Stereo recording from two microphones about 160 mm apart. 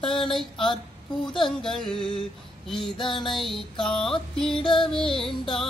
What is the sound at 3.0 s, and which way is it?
Music, 30° left (ahead or behind).